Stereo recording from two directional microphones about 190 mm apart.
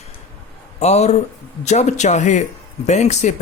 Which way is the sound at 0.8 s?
35° left (ahead or behind).